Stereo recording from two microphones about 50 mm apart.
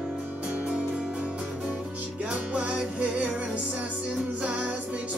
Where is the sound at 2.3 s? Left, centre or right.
Right.